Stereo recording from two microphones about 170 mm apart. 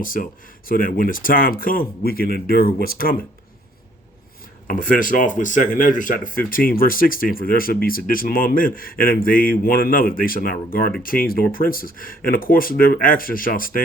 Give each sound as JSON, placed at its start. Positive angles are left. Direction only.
{"t": 0.0, "sound": "speech", "side_deg": 55}
{"t": 4.7, "sound": "speech", "side_deg": 50}